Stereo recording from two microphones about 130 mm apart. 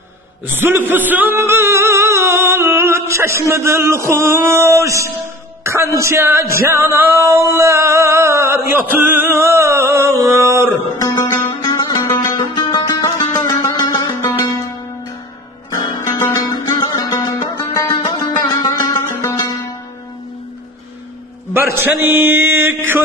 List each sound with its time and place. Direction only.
0.6 s a sound: 15° right (ahead or behind)
5.6 s music: 20° right (ahead or behind)
10.7 s music: 25° left (ahead or behind)
15.7 s music: 25° left (ahead or behind)
21.5 s a man's voice: 15° right (ahead or behind)
22.0 s mantra: 15° right (ahead or behind)